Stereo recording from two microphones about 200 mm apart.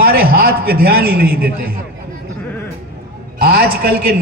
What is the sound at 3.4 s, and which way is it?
Speech, 50° right (ahead or behind).